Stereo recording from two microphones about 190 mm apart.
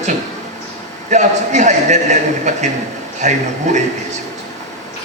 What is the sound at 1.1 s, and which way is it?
A man's voice, 40° right (ahead or behind).